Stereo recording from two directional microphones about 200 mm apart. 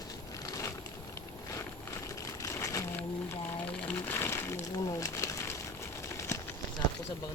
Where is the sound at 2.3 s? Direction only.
15° left (ahead or behind).